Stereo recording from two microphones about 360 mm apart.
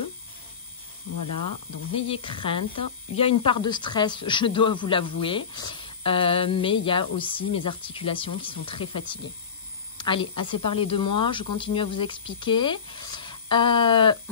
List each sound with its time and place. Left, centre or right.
1.1 s speech: left
2.0 s a woman's voice: centre